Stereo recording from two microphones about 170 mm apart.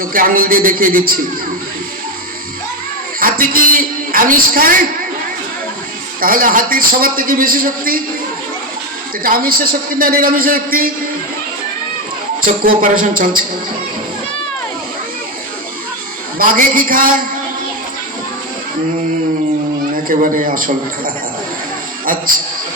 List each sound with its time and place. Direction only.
0.0 s a man's voice: 55° right (ahead or behind)
3.2 s a man's voice: 55° right (ahead or behind)
6.1 s a man's voice: 55° right (ahead or behind)
9.2 s a man's voice: 55° right (ahead or behind)
12.4 s a man's voice: 55° right (ahead or behind)
16.4 s a man's voice: 55° right (ahead or behind)
20.1 s a man's voice: 55° right (ahead or behind)
22.0 s a sound: 55° right (ahead or behind)